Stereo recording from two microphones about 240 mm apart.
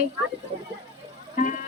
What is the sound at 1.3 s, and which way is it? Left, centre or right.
Speech, left.